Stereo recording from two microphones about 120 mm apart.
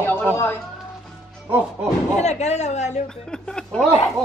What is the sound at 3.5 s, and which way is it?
Speech, 5° left (ahead or behind).